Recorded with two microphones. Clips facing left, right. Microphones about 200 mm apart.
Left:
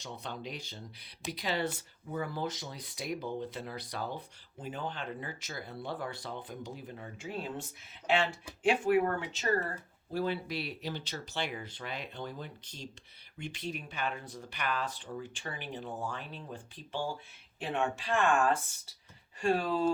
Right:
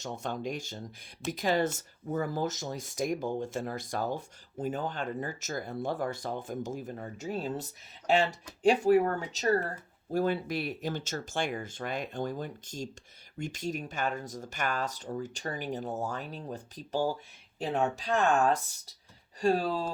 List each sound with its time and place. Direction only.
0.0 s speech: 45° right (ahead or behind)